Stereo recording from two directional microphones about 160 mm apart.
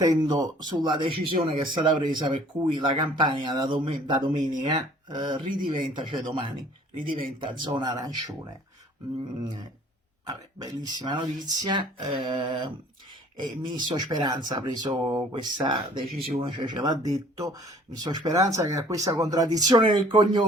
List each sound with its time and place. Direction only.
0.0 s speech: 25° right (ahead or behind)
10.2 s speech: 25° right (ahead or behind)